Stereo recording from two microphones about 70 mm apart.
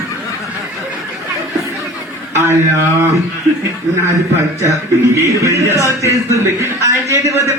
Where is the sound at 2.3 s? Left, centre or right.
Right.